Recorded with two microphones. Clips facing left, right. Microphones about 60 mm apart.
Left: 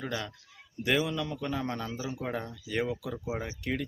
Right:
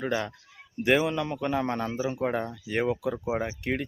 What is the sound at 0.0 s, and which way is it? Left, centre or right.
Speech, right.